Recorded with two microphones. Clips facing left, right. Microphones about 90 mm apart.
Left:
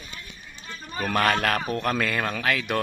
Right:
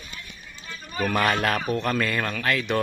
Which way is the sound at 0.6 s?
35° left (ahead or behind).